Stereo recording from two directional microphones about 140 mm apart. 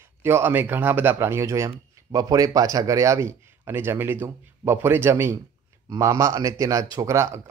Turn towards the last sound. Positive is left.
turn(degrees=-20)  # may be behind; listen again after turning